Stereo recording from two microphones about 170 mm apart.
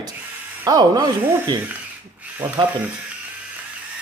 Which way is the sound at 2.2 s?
10° right (ahead or behind).